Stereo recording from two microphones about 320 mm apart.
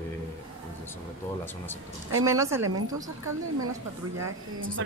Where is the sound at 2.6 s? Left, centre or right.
Right.